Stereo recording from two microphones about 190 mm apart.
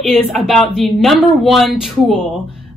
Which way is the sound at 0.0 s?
Centre (ahead or behind).